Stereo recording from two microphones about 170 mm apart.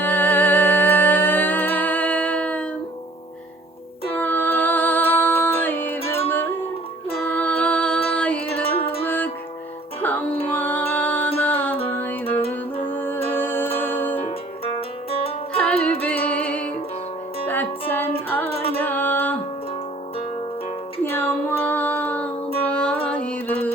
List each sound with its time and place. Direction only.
0.0 s music: 10° left (ahead or behind)
4.1 s music: 10° left (ahead or behind)
12.2 s music: 35° left (ahead or behind)
12.9 s music: 10° left (ahead or behind)
14.2 s music: 35° left (ahead or behind)
15.5 s music: 10° left (ahead or behind)
18.5 s music: 35° left (ahead or behind)
18.8 s music: 10° left (ahead or behind)
21.0 s child singing: 15° left (ahead or behind)
22.6 s music: 5° left (ahead or behind)